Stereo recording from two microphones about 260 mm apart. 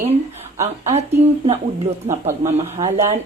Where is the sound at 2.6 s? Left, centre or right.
Right.